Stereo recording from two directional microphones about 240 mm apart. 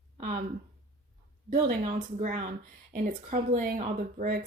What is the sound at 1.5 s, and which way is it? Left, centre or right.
Speech, right.